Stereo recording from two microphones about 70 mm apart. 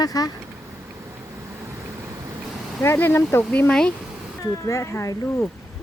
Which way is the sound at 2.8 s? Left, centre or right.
Left.